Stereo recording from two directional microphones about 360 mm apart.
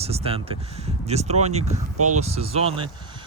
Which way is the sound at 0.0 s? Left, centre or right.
Centre.